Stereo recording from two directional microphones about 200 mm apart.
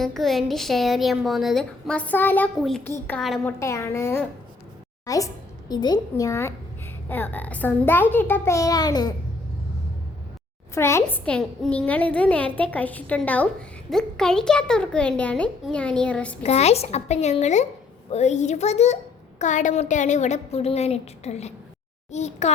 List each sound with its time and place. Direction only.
0.0 s a woman's voice: centre (ahead or behind)
3.6 s a woman's voice: 15° left (ahead or behind)
10.8 s a woman's voice: 15° left (ahead or behind)
16.4 s a woman's voice: 30° left (ahead or behind)